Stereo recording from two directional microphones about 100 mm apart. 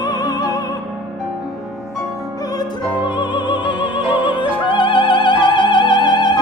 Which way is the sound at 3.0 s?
50° left (ahead or behind).